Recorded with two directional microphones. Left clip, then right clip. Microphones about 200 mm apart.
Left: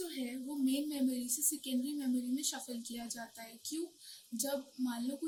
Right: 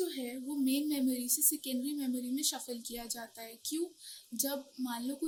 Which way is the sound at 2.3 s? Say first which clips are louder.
Right 3 dB; 55° right (ahead or behind).